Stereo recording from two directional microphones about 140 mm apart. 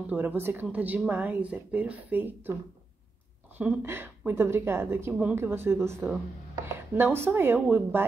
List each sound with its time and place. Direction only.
0.1 s speech: 10° right (ahead or behind)
3.5 s speech: 15° right (ahead or behind)